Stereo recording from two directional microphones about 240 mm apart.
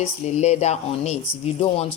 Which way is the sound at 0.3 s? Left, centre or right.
Left.